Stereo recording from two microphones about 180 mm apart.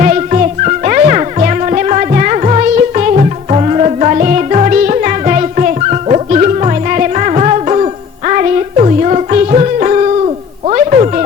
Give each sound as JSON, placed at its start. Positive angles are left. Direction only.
{"t": 0.0, "sound": "music", "side_deg": -45}